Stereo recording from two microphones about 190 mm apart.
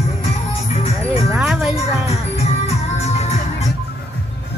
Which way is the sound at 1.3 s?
5° right (ahead or behind).